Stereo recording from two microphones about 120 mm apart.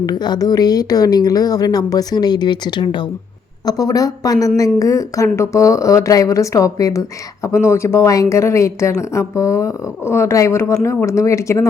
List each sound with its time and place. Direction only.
0.0 s a woman's voice: 35° left (ahead or behind)